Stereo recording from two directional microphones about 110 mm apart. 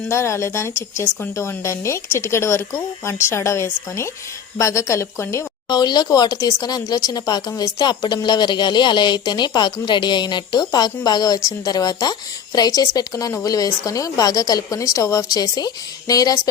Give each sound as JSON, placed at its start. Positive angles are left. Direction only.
{"t": 0.0, "sound": "speech", "side_deg": 25}
{"t": 5.6, "sound": "speech", "side_deg": 40}